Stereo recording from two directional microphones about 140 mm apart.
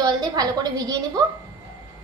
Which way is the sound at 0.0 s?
30° right (ahead or behind).